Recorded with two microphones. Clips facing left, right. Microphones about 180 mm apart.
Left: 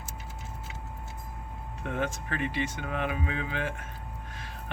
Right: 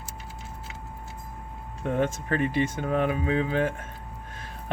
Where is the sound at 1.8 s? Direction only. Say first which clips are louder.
Right 6 dB; 40° right (ahead or behind).